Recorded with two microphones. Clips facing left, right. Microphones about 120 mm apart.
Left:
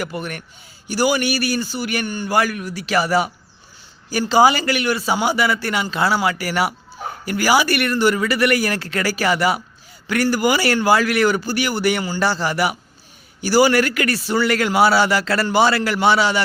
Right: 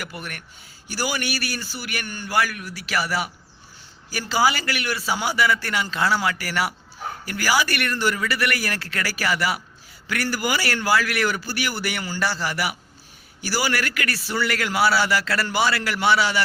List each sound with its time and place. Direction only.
0.0 s a man's voice: 25° left (ahead or behind)